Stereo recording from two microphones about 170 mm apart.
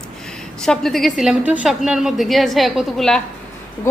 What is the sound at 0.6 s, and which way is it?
A woman's voice, 5° left (ahead or behind).